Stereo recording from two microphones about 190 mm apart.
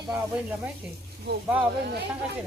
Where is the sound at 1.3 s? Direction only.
60° right (ahead or behind).